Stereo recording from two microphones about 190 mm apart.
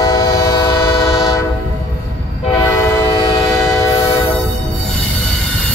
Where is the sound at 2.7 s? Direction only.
15° left (ahead or behind).